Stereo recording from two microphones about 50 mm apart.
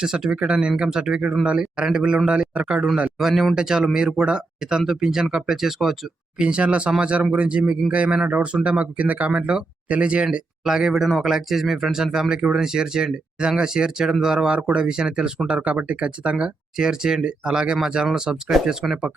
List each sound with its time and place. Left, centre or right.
0.0 s speech: centre
3.2 s speech: centre
6.4 s speech: right
9.3 s speech: centre
10.6 s speech: centre